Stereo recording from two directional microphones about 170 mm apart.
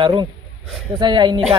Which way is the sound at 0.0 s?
30° right (ahead or behind).